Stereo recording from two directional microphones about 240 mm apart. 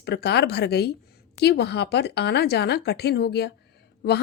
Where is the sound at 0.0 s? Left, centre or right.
Left.